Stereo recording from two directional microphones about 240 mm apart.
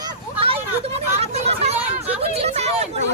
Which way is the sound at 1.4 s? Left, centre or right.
Right.